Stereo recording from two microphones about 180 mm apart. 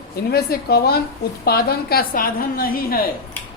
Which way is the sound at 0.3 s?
60° left (ahead or behind).